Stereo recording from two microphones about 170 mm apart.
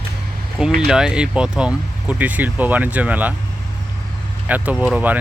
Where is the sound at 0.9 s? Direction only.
5° right (ahead or behind).